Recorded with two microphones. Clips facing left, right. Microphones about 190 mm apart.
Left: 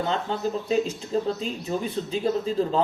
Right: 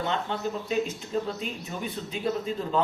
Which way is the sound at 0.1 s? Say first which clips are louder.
Left 3 dB; 35° left (ahead or behind).